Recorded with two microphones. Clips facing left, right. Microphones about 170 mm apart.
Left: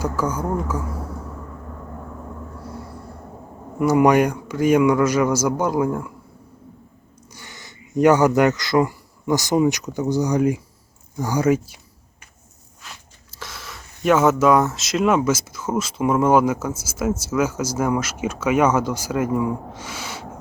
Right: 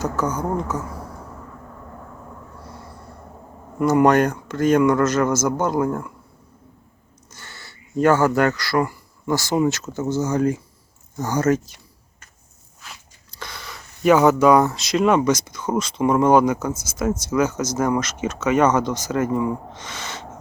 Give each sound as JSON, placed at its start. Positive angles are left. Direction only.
{"t": 0.0, "sound": "speech", "side_deg": 10}
{"t": 3.8, "sound": "speech", "side_deg": 10}
{"t": 7.3, "sound": "speech", "side_deg": 15}
{"t": 13.3, "sound": "speech", "side_deg": 0}